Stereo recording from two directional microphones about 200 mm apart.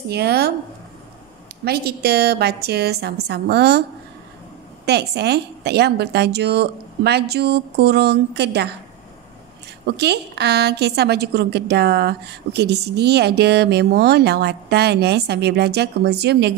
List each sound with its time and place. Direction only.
0.1 s a woman's voice: 55° right (ahead or behind)
1.6 s a woman's voice: 50° right (ahead or behind)
4.8 s a woman's voice: 55° right (ahead or behind)
9.8 s a woman's voice: 55° right (ahead or behind)